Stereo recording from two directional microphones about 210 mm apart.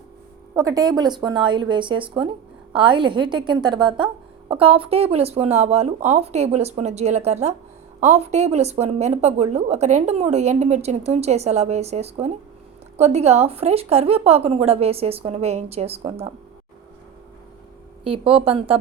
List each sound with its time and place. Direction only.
0.5 s speech: 15° right (ahead or behind)
18.4 s speech: 25° right (ahead or behind)